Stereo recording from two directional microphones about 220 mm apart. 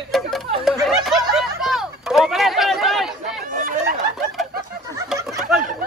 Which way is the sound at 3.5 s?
40° right (ahead or behind).